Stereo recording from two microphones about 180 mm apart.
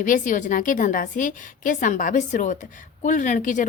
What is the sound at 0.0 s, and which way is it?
A woman's voice, 45° left (ahead or behind).